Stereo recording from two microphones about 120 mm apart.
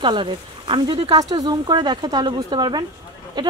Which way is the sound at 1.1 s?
35° right (ahead or behind).